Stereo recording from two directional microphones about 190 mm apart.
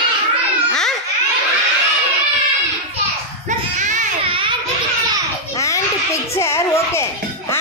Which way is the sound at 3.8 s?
40° right (ahead or behind).